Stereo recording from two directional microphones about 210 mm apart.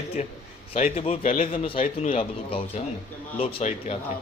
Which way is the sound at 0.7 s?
30° left (ahead or behind).